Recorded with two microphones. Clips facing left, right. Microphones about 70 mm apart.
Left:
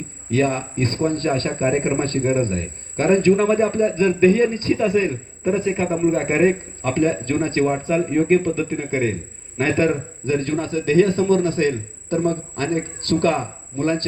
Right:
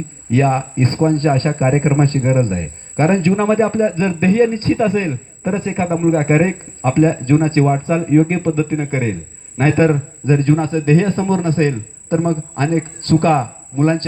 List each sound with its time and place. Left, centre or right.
0.3 s a man's voice: right